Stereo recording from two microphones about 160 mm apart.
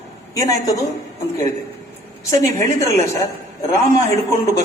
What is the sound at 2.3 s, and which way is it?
Speech, 20° left (ahead or behind).